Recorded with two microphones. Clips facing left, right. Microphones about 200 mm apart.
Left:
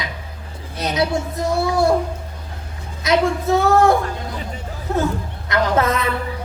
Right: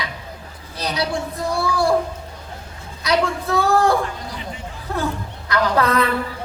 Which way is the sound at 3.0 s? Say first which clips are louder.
Left 3 dB; 20° left (ahead or behind).